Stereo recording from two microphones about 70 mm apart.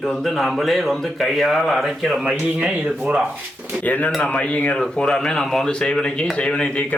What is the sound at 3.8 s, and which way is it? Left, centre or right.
Speech, left.